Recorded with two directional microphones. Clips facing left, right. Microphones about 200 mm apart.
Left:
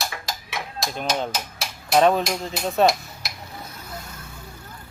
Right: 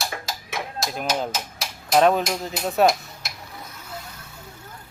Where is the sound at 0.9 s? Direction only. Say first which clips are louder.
Even; 5° right (ahead or behind).